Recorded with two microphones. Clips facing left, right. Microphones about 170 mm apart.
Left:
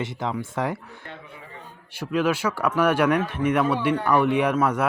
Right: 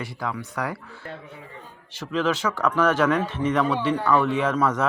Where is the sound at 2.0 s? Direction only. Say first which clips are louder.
Left 1 dB; 10° left (ahead or behind).